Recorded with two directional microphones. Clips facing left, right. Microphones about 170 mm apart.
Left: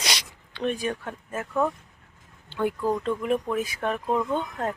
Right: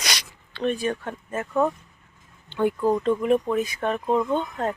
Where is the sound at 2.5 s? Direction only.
5° left (ahead or behind).